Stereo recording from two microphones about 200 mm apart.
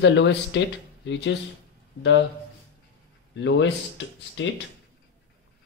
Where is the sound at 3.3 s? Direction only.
65° left (ahead or behind).